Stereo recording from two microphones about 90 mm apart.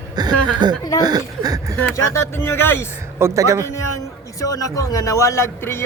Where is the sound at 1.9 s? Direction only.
30° left (ahead or behind).